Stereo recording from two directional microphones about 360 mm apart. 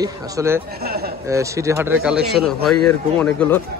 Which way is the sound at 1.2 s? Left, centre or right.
Centre.